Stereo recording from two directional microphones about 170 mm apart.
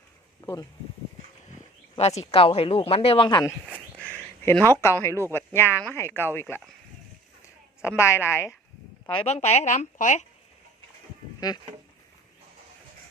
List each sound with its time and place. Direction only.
0.4 s speech: 20° left (ahead or behind)
2.0 s speech: 40° left (ahead or behind)
4.0 s speech: 10° left (ahead or behind)
7.9 s speech: 15° left (ahead or behind)
9.0 s speech: 35° left (ahead or behind)
11.3 s speech: 25° left (ahead or behind)